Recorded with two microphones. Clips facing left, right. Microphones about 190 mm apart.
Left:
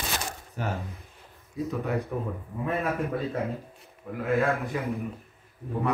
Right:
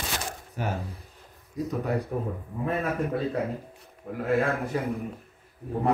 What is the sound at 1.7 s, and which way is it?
A man's voice, 35° right (ahead or behind).